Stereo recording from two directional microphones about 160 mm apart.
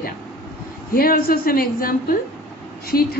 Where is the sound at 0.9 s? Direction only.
65° left (ahead or behind).